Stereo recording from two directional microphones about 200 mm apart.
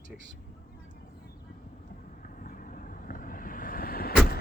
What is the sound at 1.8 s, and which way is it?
Vehicle, 40° left (ahead or behind).